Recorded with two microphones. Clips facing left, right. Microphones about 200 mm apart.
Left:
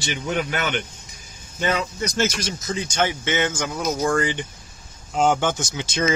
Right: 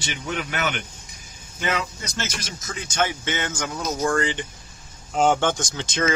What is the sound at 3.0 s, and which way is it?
Speech, 15° left (ahead or behind).